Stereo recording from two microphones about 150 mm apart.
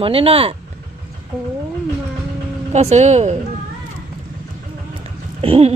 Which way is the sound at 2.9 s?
50° right (ahead or behind).